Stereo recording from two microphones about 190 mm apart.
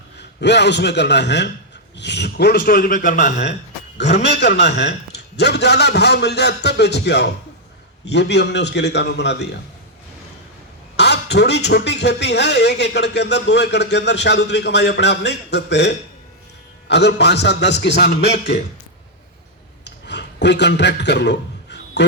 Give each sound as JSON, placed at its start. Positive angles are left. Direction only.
{"t": 0.2, "sound": "speech", "side_deg": 65}
{"t": 3.9, "sound": "speech", "side_deg": 65}
{"t": 10.9, "sound": "speech", "side_deg": 65}
{"t": 19.8, "sound": "a sound", "side_deg": 65}